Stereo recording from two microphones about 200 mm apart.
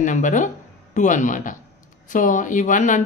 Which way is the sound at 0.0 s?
40° left (ahead or behind).